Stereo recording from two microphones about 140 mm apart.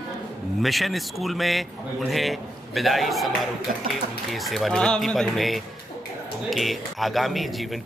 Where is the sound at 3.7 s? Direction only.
90° right.